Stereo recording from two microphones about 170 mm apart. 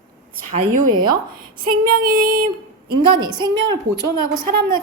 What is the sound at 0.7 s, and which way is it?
A woman's voice, 50° right (ahead or behind).